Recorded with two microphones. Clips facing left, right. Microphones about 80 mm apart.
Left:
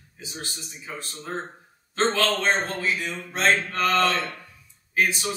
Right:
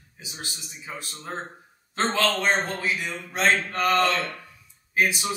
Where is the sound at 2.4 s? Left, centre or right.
Centre.